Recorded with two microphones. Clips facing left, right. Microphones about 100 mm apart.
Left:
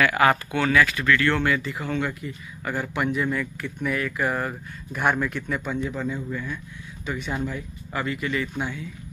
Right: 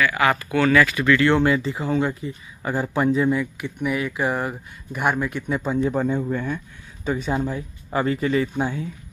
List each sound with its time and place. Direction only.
0.7 s speech: centre (ahead or behind)
0.9 s speech: 20° right (ahead or behind)
3.3 s speech: 15° right (ahead or behind)
4.9 s speech: 10° right (ahead or behind)
5.5 s speech: 30° right (ahead or behind)
6.1 s speech: 55° right (ahead or behind)
7.1 s speech: 35° right (ahead or behind)